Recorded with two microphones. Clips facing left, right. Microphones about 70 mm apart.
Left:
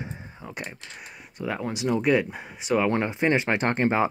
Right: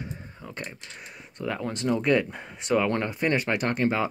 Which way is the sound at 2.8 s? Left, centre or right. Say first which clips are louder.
Left 3 dB; centre.